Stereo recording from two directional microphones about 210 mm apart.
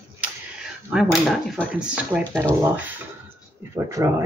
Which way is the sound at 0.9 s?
Centre (ahead or behind).